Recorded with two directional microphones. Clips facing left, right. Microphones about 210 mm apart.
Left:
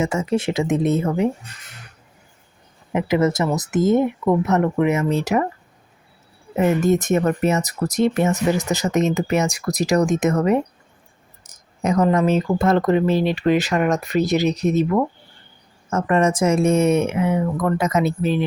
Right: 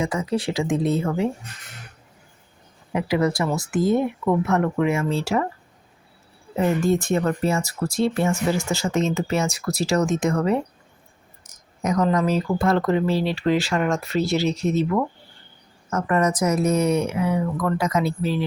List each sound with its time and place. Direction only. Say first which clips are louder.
0.0 s speech: left 3 dB; 25° left (ahead or behind)
2.9 s speech: left 3 dB; 20° left (ahead or behind)
6.6 s speech: left 3 dB; 20° left (ahead or behind)
11.4 s a sound: left 3 dB; 30° left (ahead or behind)
12.0 s speech: left 3 dB; 25° left (ahead or behind)